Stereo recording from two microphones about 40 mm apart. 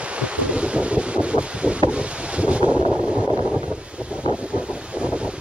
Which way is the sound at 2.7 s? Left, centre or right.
Centre.